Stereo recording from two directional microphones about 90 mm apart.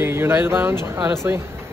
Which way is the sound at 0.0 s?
25° right (ahead or behind).